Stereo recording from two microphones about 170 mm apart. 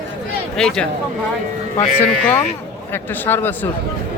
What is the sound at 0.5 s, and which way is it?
Moo, 5° left (ahead or behind).